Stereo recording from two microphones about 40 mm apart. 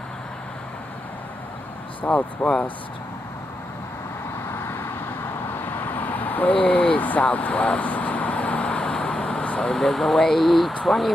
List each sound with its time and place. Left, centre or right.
2.1 s speech: left
4.5 s vehicle: left
6.6 s vehicle: left
9.7 s speech: centre